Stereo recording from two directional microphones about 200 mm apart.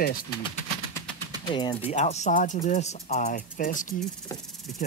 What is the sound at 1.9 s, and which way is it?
Speech, 35° left (ahead or behind).